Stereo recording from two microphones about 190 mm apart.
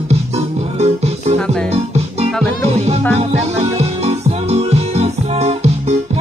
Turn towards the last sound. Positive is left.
turn(degrees=-35)  # may be behind; listen again after turning